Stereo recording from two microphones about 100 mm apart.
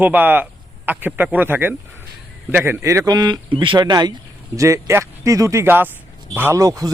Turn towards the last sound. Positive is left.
turn(degrees=-35)  # may be behind; listen again after turning